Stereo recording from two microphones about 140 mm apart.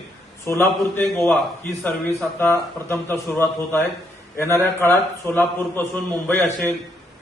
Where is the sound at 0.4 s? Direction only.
15° left (ahead or behind).